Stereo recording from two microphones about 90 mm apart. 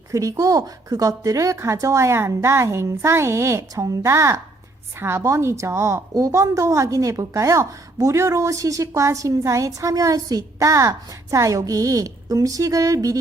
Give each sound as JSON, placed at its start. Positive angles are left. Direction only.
{"t": 0.1, "sound": "a woman's voice", "side_deg": -35}